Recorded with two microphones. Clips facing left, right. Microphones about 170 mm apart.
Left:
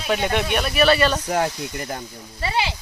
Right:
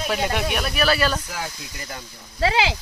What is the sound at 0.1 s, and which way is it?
Speech, 5° right (ahead or behind).